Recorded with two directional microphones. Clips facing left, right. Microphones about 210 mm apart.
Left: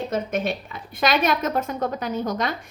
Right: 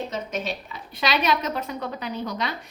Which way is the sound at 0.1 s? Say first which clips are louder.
Left 5 dB; 50° left (ahead or behind).